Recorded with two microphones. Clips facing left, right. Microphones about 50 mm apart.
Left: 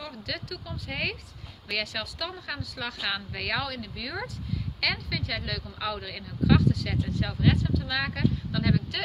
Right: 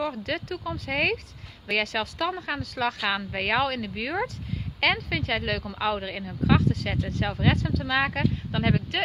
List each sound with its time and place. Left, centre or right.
0.0 s speech: right
0.7 s speech: right